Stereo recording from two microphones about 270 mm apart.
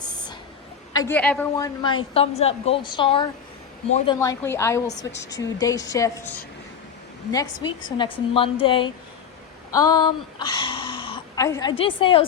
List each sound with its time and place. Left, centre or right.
0.9 s a woman's voice: centre
4.9 s a woman's voice: left
5.3 s a woman's voice: centre
7.9 s a woman's voice: centre